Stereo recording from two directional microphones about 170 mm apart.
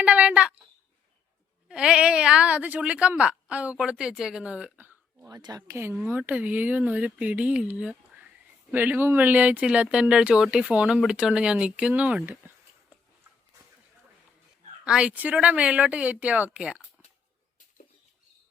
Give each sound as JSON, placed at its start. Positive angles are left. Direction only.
{"t": 0.0, "sound": "a sound", "side_deg": -5}
{"t": 1.6, "sound": "a woman's voice", "side_deg": -5}
{"t": 14.8, "sound": "speech", "side_deg": -5}